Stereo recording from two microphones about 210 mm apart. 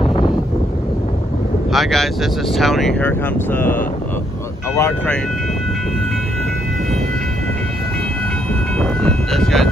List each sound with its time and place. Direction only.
0.0 s wind noise: 20° left (ahead or behind)
1.7 s speech: centre (ahead or behind)
8.7 s train: 5° left (ahead or behind)